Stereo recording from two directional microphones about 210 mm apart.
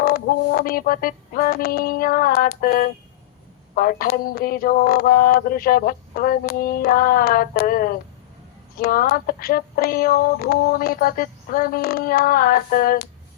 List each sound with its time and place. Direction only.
0.0 s female singing: 45° left (ahead or behind)